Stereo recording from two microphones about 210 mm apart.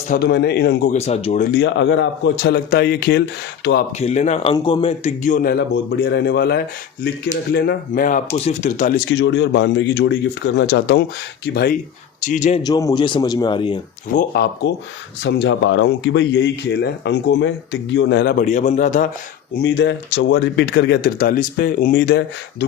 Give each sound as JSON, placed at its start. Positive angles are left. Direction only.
{"t": 0.1, "sound": "speech", "side_deg": 50}
{"t": 0.9, "sound": "speech", "side_deg": 30}
{"t": 1.5, "sound": "speech", "side_deg": 60}
{"t": 4.0, "sound": "speech", "side_deg": 35}
{"t": 9.0, "sound": "speech", "side_deg": 55}
{"t": 12.2, "sound": "speech", "side_deg": 35}
{"t": 12.6, "sound": "speech", "side_deg": 20}
{"t": 14.1, "sound": "speech", "side_deg": 45}
{"t": 19.5, "sound": "speech", "side_deg": 55}